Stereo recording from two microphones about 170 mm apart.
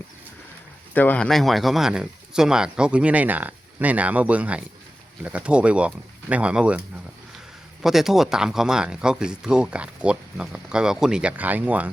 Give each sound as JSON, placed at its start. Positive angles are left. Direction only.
{"t": 0.9, "sound": "speech", "side_deg": 10}